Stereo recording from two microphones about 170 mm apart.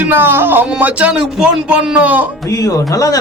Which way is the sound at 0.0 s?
10° right (ahead or behind).